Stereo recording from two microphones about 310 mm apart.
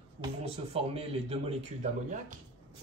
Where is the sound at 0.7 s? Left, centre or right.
Centre.